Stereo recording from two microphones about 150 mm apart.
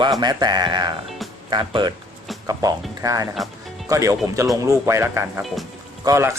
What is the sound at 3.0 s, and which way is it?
Speech, 20° right (ahead or behind).